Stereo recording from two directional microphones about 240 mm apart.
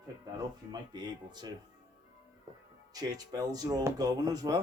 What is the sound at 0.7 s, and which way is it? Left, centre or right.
Speech, centre.